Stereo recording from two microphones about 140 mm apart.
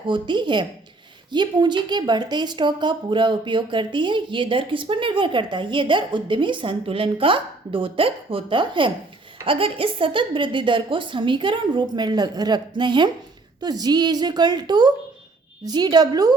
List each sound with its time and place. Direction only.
0.1 s a woman's voice: 35° right (ahead or behind)